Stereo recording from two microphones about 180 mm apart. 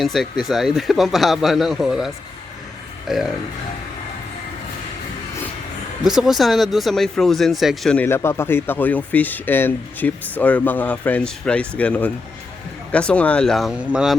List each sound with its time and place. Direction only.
0.0 s speech: centre (ahead or behind)
6.1 s speech: 5° right (ahead or behind)